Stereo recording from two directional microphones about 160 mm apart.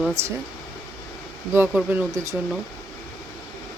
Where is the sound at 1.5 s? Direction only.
15° right (ahead or behind).